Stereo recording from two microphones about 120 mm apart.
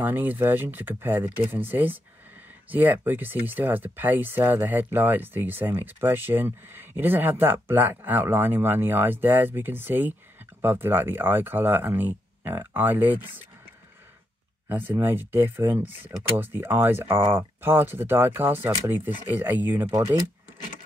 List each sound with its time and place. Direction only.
0.0 s speech: 15° right (ahead or behind)
14.7 s speech: 15° right (ahead or behind)